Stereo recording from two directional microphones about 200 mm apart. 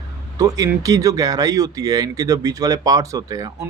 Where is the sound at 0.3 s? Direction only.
15° right (ahead or behind).